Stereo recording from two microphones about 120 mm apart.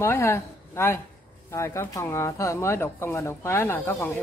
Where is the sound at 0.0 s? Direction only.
20° left (ahead or behind).